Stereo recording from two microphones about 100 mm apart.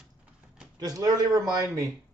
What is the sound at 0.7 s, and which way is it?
A man's voice, 40° right (ahead or behind).